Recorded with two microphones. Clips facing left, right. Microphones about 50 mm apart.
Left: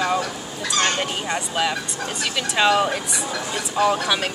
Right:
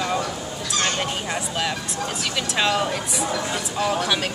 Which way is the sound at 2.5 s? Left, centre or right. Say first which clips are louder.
Left 4 dB; centre.